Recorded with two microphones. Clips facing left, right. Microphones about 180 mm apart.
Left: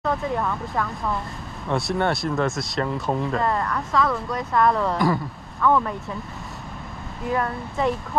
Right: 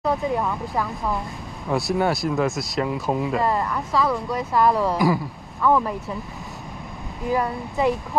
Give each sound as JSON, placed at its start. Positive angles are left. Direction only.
{"t": 0.2, "sound": "speech", "side_deg": -15}
{"t": 0.7, "sound": "speech", "side_deg": -5}
{"t": 7.2, "sound": "speech", "side_deg": 0}